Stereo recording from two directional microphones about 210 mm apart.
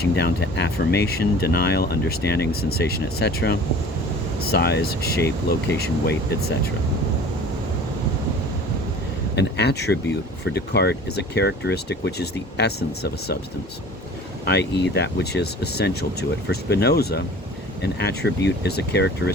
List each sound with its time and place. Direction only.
0.0 s speech: 50° left (ahead or behind)
9.3 s speech: 55° left (ahead or behind)
14.4 s speech: 50° left (ahead or behind)